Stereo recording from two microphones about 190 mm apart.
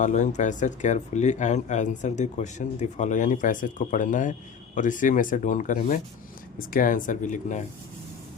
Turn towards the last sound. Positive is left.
turn(degrees=40)  # may be behind; listen again after turning